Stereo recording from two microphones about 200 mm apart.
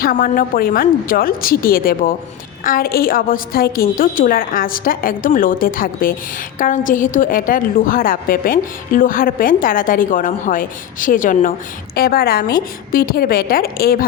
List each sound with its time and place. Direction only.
0.0 s a woman's voice: 45° left (ahead or behind)